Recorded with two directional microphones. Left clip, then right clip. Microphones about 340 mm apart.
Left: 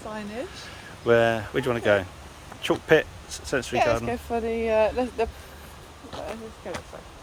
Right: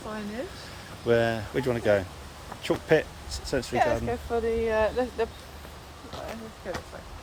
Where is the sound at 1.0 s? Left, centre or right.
Centre.